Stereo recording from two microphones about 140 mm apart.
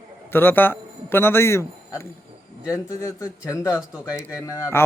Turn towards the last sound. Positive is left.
turn(degrees=20)  # may be behind; listen again after turning